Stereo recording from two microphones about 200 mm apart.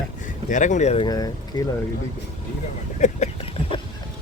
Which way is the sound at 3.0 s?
35° left (ahead or behind).